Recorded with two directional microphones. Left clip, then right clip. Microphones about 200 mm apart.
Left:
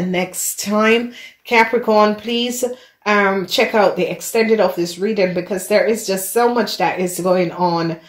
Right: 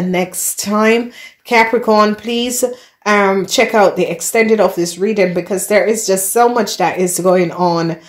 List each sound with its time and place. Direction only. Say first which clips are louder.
0.1 s speech: right 5 dB; 30° right (ahead or behind)